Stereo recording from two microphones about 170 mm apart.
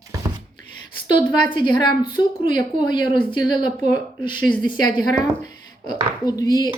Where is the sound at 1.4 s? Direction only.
30° left (ahead or behind).